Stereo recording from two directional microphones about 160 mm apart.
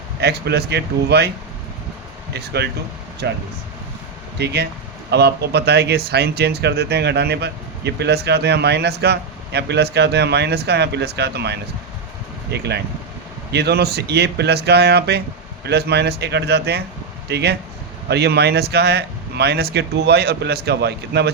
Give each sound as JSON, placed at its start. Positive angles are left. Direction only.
{"t": 0.2, "sound": "speech", "side_deg": -90}
{"t": 2.3, "sound": "speech", "side_deg": -90}